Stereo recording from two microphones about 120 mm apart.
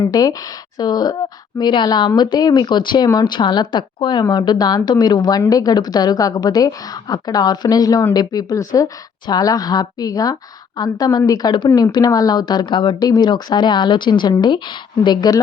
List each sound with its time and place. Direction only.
0.0 s a woman's voice: 30° left (ahead or behind)